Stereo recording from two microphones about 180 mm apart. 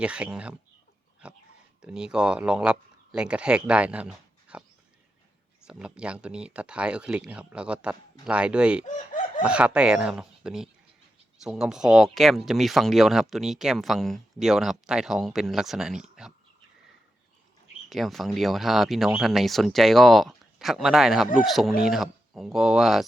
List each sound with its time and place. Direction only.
0.0 s speech: 5° right (ahead or behind)
5.6 s speech: 5° right (ahead or behind)
8.8 s chicken: 45° left (ahead or behind)
9.4 s speech: 5° right (ahead or behind)
17.8 s speech: centre (ahead or behind)